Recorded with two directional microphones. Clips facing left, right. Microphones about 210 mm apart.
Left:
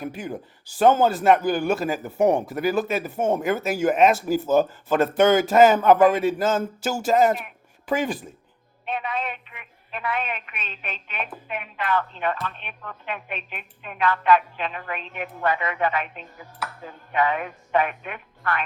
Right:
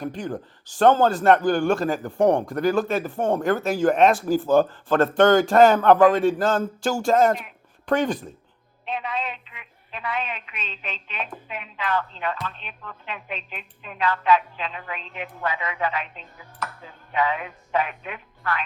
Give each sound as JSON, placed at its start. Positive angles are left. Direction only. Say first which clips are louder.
{"t": 0.0, "sound": "speech", "louder": "right 2 dB", "side_deg": 5}
{"t": 8.9, "sound": "speech", "louder": "left 1 dB", "side_deg": 55}